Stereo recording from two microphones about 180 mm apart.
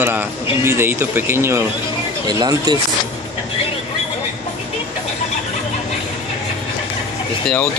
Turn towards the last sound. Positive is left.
turn(degrees=5)  # may be behind; listen again after turning